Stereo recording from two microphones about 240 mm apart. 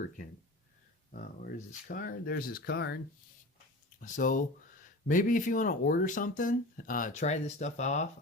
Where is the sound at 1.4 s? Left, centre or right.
Left.